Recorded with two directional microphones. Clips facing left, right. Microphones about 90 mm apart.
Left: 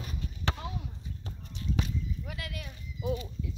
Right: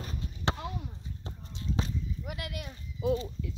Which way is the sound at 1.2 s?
25° right (ahead or behind).